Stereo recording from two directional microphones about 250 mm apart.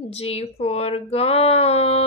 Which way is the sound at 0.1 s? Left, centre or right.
Left.